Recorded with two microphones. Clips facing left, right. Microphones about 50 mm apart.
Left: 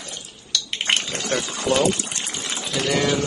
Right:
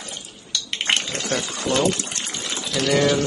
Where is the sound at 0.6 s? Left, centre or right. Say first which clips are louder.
Right 1 dB; centre.